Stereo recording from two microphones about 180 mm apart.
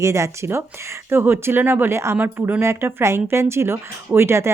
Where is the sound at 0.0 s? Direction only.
15° right (ahead or behind).